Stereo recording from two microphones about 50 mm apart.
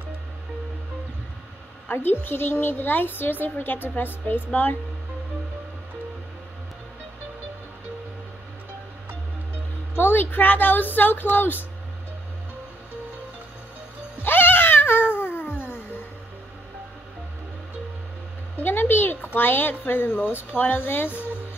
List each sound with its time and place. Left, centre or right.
1.9 s a woman's voice: left
9.9 s speech: left
14.1 s cat: left
18.6 s a sound: left
19.9 s a woman's voice: left